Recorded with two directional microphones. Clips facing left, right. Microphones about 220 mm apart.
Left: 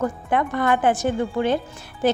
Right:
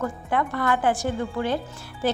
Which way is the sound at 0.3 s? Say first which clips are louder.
Left 3 dB; 20° left (ahead or behind).